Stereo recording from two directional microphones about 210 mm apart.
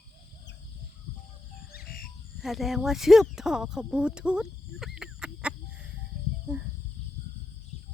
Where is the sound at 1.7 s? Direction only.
45° left (ahead or behind).